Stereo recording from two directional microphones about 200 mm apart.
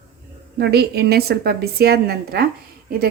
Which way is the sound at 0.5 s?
55° right (ahead or behind).